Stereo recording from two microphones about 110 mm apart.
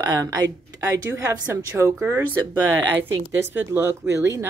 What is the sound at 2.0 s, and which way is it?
Speech, 15° right (ahead or behind).